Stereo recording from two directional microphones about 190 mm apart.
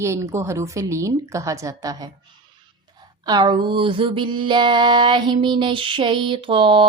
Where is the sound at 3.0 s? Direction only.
20° right (ahead or behind).